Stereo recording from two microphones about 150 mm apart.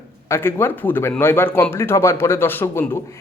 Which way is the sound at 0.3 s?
15° left (ahead or behind).